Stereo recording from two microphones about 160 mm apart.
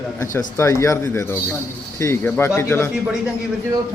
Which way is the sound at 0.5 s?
20° left (ahead or behind).